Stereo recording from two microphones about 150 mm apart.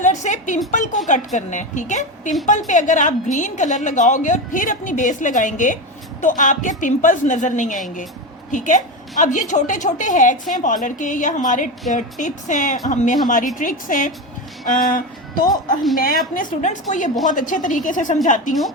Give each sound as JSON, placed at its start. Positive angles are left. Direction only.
{"t": 0.0, "sound": "a woman's voice", "side_deg": 55}